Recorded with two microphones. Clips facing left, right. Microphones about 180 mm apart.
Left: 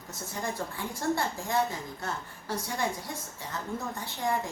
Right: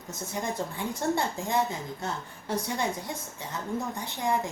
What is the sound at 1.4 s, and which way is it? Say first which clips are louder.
A woman's voice: right 1 dB; 20° right (ahead or behind).